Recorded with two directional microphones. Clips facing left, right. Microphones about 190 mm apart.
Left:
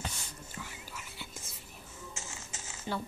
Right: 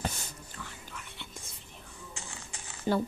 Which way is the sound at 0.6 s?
10° left (ahead or behind).